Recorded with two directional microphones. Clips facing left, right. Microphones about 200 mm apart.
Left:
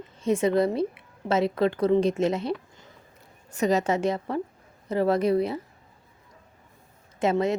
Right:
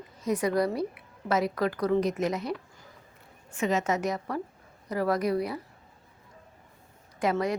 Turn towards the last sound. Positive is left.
turn(degrees=25)  # may be behind; listen again after turning